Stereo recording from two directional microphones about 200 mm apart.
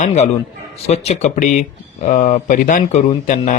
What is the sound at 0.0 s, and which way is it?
Speech, 35° left (ahead or behind).